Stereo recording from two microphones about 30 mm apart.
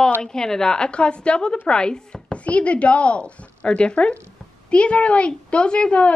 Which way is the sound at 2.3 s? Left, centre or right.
Left.